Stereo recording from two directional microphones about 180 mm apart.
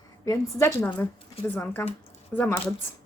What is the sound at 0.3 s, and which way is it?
Speech, 15° left (ahead or behind).